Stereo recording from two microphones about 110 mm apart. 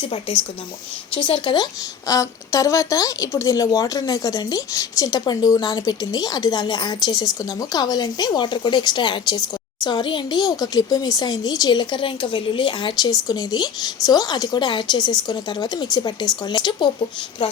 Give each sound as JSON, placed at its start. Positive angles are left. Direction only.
{"t": 0.0, "sound": "speech", "side_deg": 60}
{"t": 1.1, "sound": "a woman's voice", "side_deg": 50}